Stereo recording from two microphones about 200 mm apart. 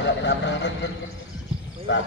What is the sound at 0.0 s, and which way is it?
Speech, 65° left (ahead or behind).